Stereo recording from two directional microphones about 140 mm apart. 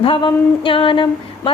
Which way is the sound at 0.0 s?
40° left (ahead or behind).